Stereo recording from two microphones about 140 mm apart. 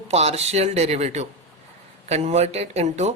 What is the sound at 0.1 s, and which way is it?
Speech, 50° right (ahead or behind).